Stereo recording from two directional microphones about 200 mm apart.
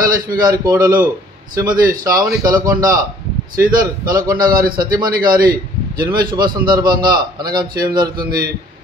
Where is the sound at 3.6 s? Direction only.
45° right (ahead or behind).